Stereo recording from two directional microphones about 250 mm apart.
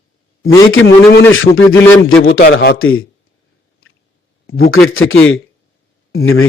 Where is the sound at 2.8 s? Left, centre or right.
Left.